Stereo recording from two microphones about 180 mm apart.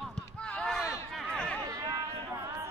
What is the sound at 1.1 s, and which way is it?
Chatter, 5° left (ahead or behind).